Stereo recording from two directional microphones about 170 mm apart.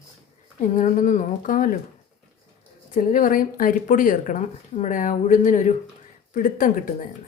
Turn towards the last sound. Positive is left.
turn(degrees=50)  # may be behind; listen again after turning